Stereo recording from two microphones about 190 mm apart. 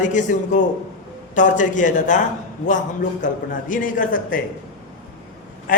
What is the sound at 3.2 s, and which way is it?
A man's voice, 45° left (ahead or behind).